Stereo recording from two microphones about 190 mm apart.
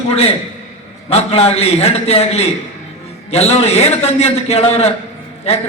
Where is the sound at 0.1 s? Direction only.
30° left (ahead or behind).